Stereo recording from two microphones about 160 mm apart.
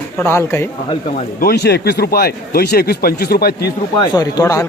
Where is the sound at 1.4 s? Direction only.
80° left.